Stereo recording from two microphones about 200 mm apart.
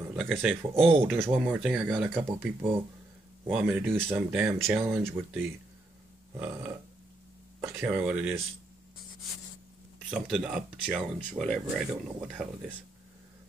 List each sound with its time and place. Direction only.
0.1 s speech: 5° right (ahead or behind)
0.7 s speech: 30° right (ahead or behind)
1.0 s speech: 10° right (ahead or behind)
4.8 s speech: 10° right (ahead or behind)
6.3 s burping: 10° right (ahead or behind)
7.7 s speech: 5° right (ahead or behind)
10.1 s speech: centre (ahead or behind)